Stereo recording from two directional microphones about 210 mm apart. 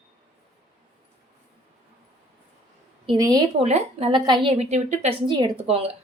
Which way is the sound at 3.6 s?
30° right (ahead or behind).